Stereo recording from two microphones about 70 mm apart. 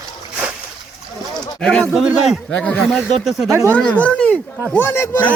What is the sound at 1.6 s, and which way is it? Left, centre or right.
Speech, centre.